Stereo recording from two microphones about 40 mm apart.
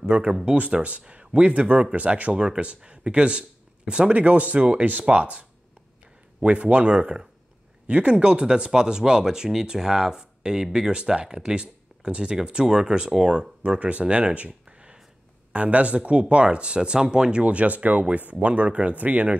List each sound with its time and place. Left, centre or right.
0.5 s speech: right
2.3 s speech: right
13.7 s speech: right
15.5 s speech: right
18.9 s speech: right